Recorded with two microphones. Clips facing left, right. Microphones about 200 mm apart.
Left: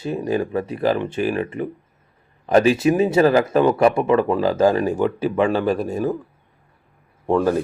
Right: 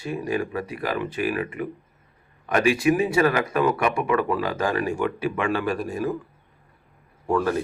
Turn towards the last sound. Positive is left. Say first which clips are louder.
# left 5 dB
turn(degrees=25)  # may be behind; listen again after turning